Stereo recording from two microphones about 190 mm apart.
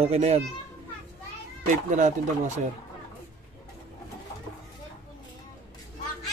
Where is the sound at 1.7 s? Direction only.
40° right (ahead or behind).